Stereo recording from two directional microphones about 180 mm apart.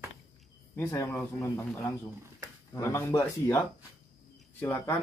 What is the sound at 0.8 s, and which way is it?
A man's voice, 15° left (ahead or behind).